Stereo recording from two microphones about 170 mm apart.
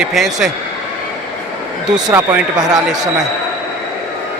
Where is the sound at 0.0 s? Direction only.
Centre (ahead or behind).